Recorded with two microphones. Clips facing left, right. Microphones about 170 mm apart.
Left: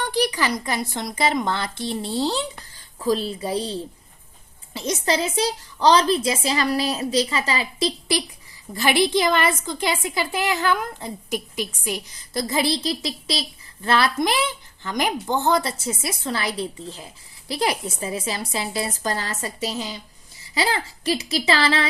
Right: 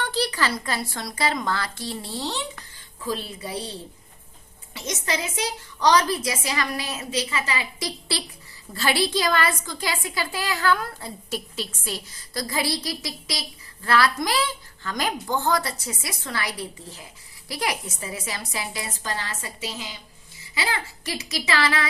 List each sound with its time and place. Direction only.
0.0 s a woman's voice: 15° left (ahead or behind); by 21.8 s 30° left (ahead or behind)